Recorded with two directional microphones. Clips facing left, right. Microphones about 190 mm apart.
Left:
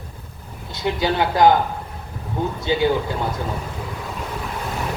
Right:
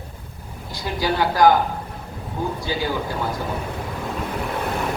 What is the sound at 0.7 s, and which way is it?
Speech, 20° left (ahead or behind).